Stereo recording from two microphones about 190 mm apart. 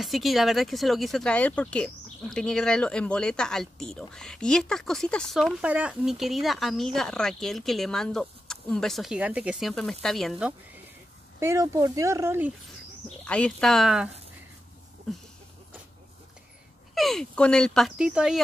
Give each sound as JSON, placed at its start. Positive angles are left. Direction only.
{"t": 0.0, "sound": "speech", "side_deg": 0}
{"t": 11.3, "sound": "speech", "side_deg": -15}
{"t": 13.2, "sound": "speech", "side_deg": 5}
{"t": 16.9, "sound": "speech", "side_deg": 0}